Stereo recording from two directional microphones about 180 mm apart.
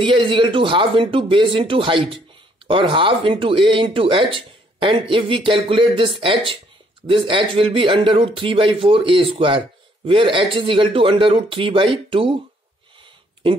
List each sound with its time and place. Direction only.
0.0 s speech: 30° right (ahead or behind)